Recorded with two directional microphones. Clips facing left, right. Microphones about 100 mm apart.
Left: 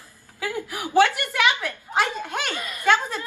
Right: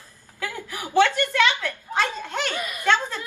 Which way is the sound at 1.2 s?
15° left (ahead or behind).